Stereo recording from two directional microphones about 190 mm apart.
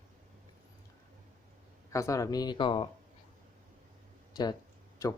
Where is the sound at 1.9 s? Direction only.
15° left (ahead or behind).